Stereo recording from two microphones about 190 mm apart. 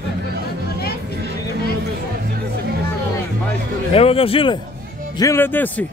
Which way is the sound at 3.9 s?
30° left (ahead or behind).